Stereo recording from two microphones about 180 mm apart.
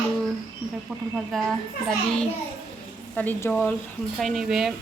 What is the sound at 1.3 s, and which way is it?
Speech, centre (ahead or behind).